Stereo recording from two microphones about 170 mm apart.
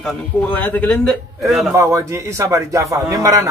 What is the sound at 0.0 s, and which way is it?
Speech, 5° left (ahead or behind).